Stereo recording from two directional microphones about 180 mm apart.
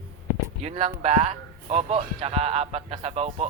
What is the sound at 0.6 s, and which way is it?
A man's voice, 35° right (ahead or behind).